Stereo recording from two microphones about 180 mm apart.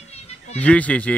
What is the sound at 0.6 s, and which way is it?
Speech, 5° left (ahead or behind).